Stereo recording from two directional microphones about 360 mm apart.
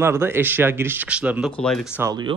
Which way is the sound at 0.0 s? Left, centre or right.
Centre.